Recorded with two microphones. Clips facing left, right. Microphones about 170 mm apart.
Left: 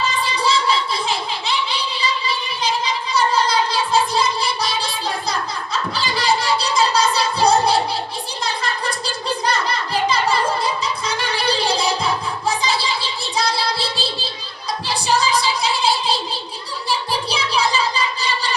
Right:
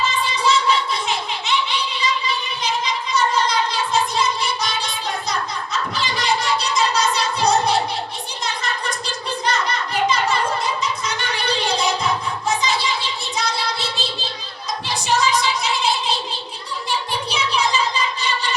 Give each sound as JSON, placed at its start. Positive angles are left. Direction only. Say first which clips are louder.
{"t": 0.4, "sound": "a sound", "louder": "right 1 dB", "side_deg": 35}
{"t": 9.6, "sound": "music", "louder": "even", "side_deg": 30}
{"t": 14.8, "sound": "child singing", "louder": "left 1 dB", "side_deg": 35}
{"t": 17.1, "sound": "music", "louder": "left 1 dB", "side_deg": 35}